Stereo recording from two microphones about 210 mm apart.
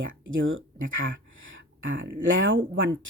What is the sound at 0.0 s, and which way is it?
Speech, 65° right (ahead or behind).